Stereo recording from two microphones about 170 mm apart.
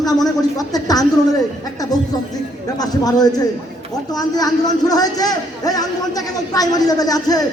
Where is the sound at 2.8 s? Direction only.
20° left (ahead or behind).